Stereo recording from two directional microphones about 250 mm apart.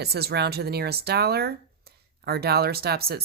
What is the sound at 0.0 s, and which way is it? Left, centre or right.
Speech, right.